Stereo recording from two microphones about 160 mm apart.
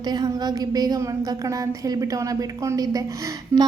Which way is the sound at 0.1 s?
25° right (ahead or behind).